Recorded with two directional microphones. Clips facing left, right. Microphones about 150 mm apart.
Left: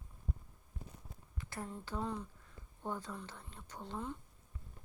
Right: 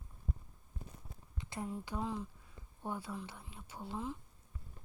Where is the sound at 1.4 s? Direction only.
20° right (ahead or behind).